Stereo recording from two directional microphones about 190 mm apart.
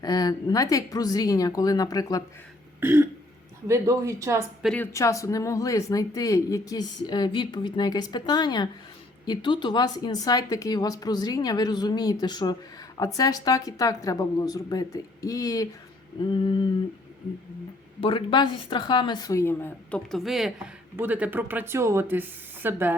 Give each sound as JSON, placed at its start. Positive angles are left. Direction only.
{"t": 0.0, "sound": "speech", "side_deg": 20}
{"t": 2.8, "sound": "speech", "side_deg": -10}
{"t": 4.6, "sound": "speech", "side_deg": 5}
{"t": 18.0, "sound": "speech", "side_deg": 25}